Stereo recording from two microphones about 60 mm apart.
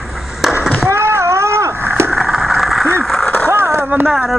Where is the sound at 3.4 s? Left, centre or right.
Right.